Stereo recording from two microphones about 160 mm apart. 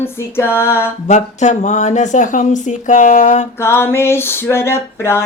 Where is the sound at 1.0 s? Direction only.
50° left (ahead or behind).